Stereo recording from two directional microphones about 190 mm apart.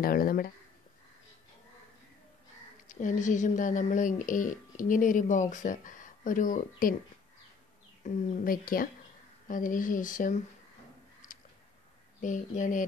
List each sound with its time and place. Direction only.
0.0 s speech: 50° left (ahead or behind)
2.9 s speech: 40° left (ahead or behind)
8.0 s speech: 40° left (ahead or behind)
11.3 s a sound: 45° left (ahead or behind)
12.2 s speech: 40° left (ahead or behind)